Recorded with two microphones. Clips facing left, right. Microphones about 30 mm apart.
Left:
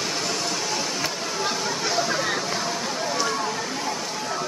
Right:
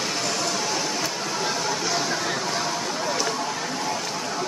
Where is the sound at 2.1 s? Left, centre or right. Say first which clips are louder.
Left 1 dB; centre.